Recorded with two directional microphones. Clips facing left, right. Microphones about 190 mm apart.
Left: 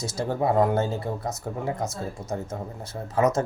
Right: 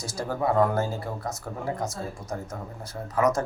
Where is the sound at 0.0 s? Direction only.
25° left (ahead or behind).